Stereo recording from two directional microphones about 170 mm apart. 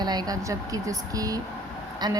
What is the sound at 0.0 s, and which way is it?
A woman's voice, 25° right (ahead or behind).